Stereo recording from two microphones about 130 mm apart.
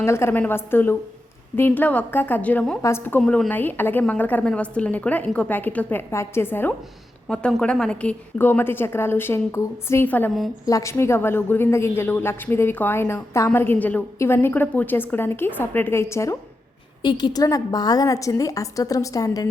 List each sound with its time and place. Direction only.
0.0 s a woman's voice: 20° left (ahead or behind)
10.7 s a woman's voice: 25° left (ahead or behind)
17.0 s a woman's voice: 35° left (ahead or behind)